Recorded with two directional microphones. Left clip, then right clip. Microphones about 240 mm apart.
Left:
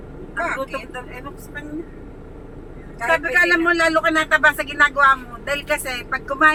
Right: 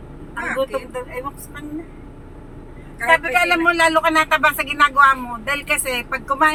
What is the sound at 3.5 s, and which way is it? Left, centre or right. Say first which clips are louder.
A man's voice: right 1 dB; right.